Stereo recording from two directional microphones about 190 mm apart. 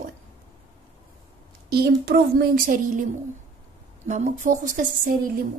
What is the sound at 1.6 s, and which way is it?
A woman's voice, 55° right (ahead or behind).